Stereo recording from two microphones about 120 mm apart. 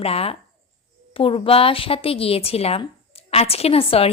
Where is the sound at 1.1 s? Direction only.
50° left (ahead or behind).